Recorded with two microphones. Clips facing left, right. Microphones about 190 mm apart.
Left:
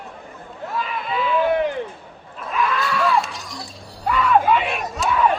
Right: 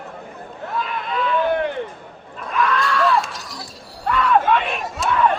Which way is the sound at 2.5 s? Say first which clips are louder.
Right 2 dB; centre (ahead or behind).